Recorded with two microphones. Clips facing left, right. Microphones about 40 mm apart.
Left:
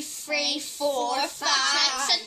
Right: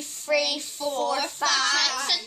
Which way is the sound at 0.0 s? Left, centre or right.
Right.